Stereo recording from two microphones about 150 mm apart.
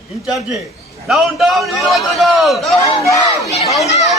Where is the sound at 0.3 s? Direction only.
Centre (ahead or behind).